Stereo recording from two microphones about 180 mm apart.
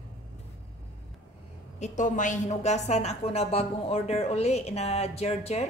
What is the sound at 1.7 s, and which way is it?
A woman's voice, 40° left (ahead or behind).